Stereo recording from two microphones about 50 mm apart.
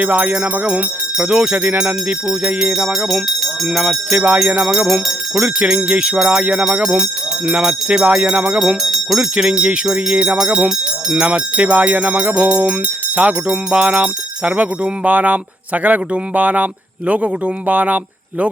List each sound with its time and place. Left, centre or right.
0.0 s speech: right
2.7 s speech: centre
4.4 s speech: right
8.8 s jingle bell: centre
9.3 s speech: right
11.3 s speech: right